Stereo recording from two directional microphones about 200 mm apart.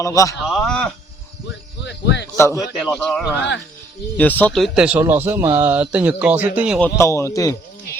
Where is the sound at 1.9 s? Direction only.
55° left (ahead or behind).